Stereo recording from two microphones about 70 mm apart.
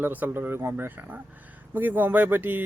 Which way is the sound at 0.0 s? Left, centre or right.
Right.